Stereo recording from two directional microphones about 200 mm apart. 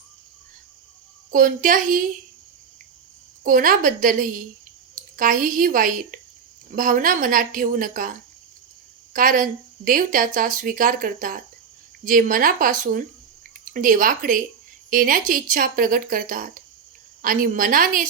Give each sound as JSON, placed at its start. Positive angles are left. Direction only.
{"t": 1.3, "sound": "speech", "side_deg": -40}
{"t": 3.4, "sound": "speech", "side_deg": -45}
{"t": 9.1, "sound": "speech", "side_deg": -40}